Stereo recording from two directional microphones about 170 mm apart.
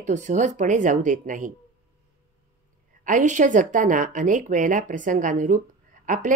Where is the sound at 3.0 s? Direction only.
50° right (ahead or behind).